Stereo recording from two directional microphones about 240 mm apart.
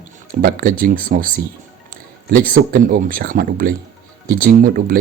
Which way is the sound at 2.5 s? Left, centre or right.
Right.